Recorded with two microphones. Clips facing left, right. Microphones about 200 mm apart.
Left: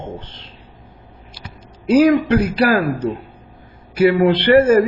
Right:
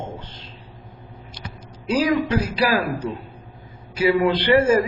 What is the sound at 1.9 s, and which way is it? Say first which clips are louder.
Speech: left 7 dB; 60° left (ahead or behind).